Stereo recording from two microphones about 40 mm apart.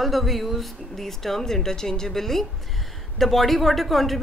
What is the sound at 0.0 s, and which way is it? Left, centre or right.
Speech, centre.